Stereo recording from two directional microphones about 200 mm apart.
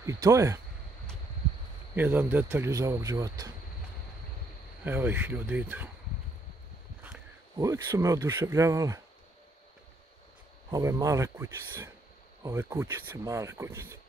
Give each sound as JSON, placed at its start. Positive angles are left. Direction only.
{"t": 0.0, "sound": "speech", "side_deg": -15}
{"t": 2.0, "sound": "speech", "side_deg": -10}
{"t": 4.8, "sound": "speech", "side_deg": -10}
{"t": 7.5, "sound": "speech", "side_deg": -15}
{"t": 10.7, "sound": "speech", "side_deg": -15}